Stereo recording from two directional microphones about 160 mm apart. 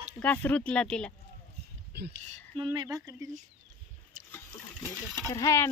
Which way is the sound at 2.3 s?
30° right (ahead or behind).